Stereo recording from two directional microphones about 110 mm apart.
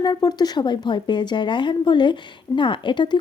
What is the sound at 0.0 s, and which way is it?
Speech, 40° left (ahead or behind).